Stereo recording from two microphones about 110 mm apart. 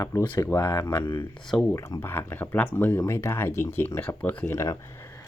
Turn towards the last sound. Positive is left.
turn(degrees=25)  # may be behind; listen again after turning